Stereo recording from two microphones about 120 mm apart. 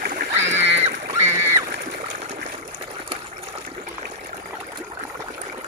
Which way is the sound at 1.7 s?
80° right.